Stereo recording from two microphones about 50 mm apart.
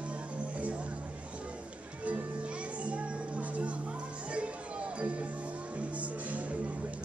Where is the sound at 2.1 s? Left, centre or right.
Right.